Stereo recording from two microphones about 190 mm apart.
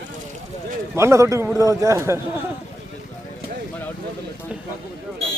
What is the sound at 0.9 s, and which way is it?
Speech, 15° right (ahead or behind).